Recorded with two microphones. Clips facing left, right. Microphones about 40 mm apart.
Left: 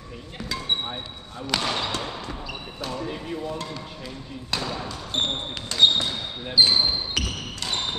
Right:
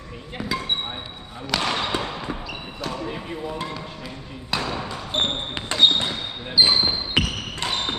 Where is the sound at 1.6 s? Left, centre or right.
Right.